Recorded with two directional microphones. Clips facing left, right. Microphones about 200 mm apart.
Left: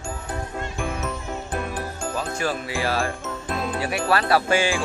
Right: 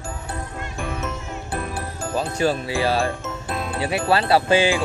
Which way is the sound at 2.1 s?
30° right (ahead or behind).